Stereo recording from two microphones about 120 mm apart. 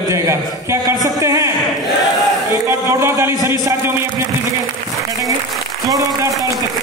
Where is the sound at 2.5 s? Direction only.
25° right (ahead or behind).